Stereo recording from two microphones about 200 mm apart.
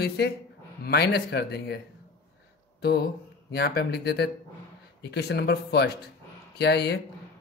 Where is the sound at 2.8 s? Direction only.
55° left (ahead or behind).